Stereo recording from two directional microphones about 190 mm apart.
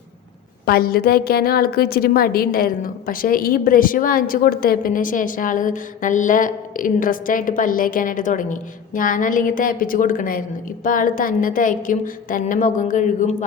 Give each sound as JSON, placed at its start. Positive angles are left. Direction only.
{"t": 0.6, "sound": "a woman's voice", "side_deg": 50}